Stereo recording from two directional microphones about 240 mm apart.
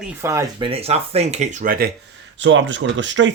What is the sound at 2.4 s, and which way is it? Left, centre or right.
Speech, right.